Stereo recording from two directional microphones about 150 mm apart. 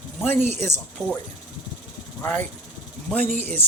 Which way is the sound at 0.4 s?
50° right (ahead or behind).